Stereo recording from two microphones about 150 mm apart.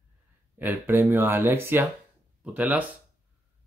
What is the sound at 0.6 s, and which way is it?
Speech, 15° right (ahead or behind).